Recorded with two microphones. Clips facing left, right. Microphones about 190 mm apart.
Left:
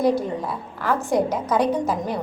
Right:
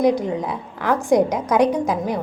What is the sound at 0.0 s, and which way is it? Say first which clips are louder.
A woman's voice: right 2 dB; 15° right (ahead or behind).